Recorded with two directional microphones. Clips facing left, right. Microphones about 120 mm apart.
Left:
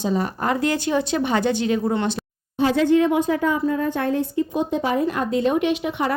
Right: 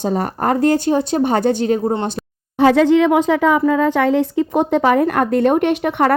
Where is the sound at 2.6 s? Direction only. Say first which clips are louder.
Right 5 dB; 85° right.